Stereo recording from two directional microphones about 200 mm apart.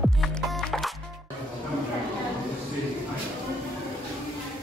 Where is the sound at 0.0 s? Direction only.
Centre (ahead or behind).